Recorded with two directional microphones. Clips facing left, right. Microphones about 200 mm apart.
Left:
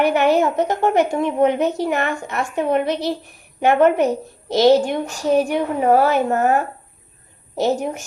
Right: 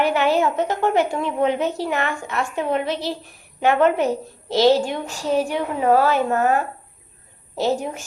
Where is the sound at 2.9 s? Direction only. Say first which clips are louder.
Left 4 dB; 15° left (ahead or behind).